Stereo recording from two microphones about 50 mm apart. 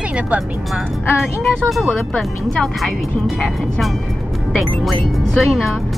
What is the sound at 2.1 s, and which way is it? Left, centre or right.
Speech, centre.